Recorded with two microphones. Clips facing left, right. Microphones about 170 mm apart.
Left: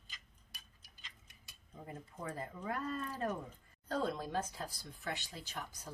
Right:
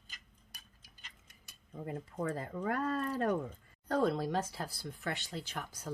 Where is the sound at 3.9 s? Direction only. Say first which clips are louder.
Right 6 dB; 70° right (ahead or behind).